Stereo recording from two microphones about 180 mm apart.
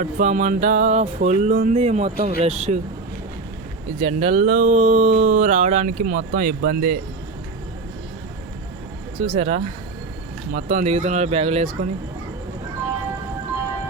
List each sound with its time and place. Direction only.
0.0 s speech: 45° right (ahead or behind)
4.0 s speech: 35° right (ahead or behind); by 7.0 s 50° right (ahead or behind)
9.2 s speech: 40° right (ahead or behind)